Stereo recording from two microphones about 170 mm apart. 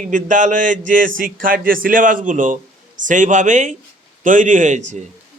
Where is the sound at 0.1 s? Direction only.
45° right (ahead or behind).